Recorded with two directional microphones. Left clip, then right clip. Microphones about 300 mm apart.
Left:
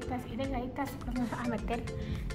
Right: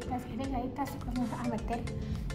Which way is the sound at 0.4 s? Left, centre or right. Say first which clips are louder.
Left 1 dB; centre.